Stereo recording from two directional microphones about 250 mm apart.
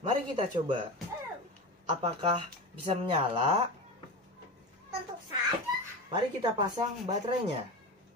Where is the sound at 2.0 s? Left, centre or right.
Right.